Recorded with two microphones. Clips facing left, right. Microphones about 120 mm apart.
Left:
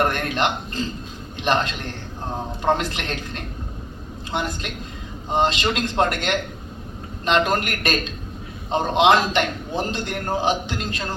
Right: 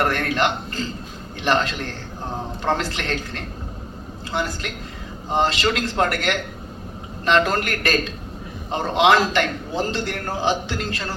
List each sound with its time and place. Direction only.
0.0 s a man's voice: 20° left (ahead or behind)